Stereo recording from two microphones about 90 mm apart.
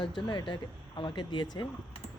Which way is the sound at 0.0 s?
55° left (ahead or behind).